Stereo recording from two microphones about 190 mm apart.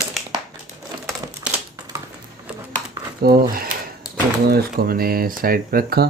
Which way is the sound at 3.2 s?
50° right (ahead or behind).